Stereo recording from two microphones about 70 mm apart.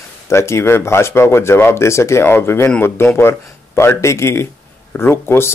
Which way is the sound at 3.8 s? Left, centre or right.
Left.